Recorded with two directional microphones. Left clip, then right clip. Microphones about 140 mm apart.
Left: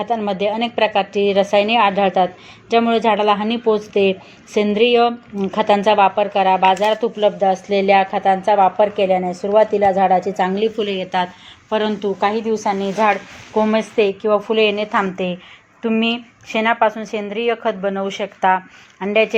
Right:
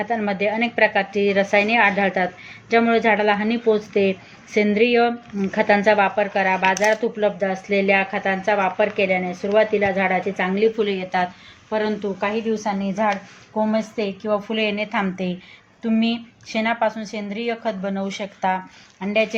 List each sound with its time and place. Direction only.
0.3 s a woman's voice: 20° left (ahead or behind); by 10.2 s 40° left (ahead or behind)
10.6 s a woman's voice: 25° left (ahead or behind)